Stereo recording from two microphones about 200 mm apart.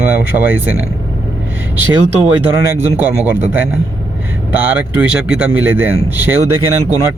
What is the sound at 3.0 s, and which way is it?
Speech, 10° right (ahead or behind).